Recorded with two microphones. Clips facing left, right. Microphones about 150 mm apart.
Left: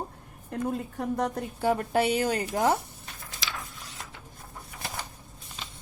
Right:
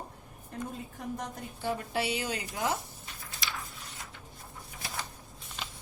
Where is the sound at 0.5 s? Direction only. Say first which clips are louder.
Left 9 dB; 65° left (ahead or behind).